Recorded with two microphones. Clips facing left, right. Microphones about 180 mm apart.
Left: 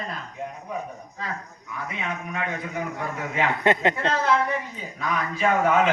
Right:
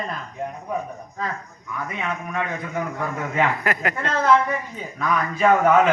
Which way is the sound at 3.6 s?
25° left (ahead or behind).